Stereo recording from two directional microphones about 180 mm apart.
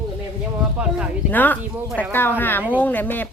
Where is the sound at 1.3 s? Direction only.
10° left (ahead or behind).